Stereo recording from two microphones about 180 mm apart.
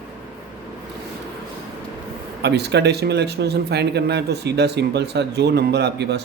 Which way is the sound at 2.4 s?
70° right (ahead or behind).